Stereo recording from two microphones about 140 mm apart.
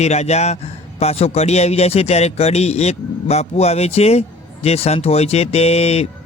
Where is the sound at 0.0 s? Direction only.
50° left (ahead or behind).